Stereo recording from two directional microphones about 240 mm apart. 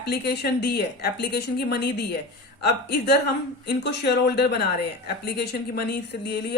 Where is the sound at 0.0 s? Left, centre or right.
Left.